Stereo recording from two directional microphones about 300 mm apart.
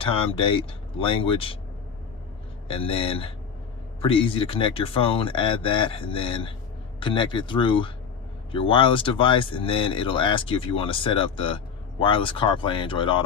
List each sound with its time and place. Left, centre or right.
0.0 s speech: centre
2.6 s speech: centre